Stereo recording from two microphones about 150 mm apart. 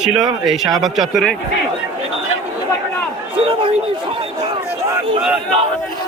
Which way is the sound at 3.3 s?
35° right (ahead or behind).